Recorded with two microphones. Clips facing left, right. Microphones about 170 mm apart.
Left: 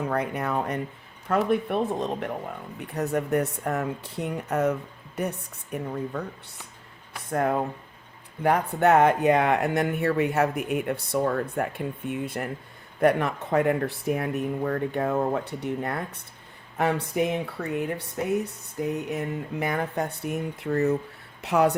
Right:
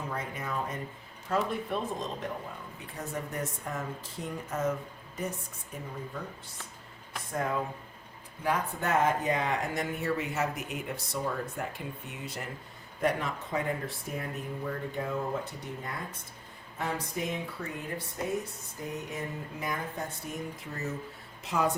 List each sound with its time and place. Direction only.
0.0 s speech: 65° left (ahead or behind)
7.3 s speech: 60° left (ahead or behind)